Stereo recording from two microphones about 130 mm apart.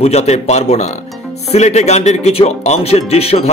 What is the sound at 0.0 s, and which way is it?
Speech, 55° left (ahead or behind).